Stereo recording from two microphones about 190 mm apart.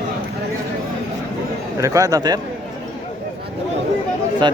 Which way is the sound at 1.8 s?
15° right (ahead or behind).